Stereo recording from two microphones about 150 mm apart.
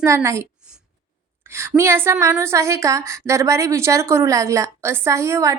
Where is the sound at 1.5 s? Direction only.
15° right (ahead or behind).